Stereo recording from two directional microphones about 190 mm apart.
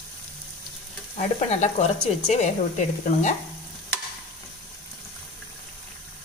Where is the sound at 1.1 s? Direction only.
35° left (ahead or behind).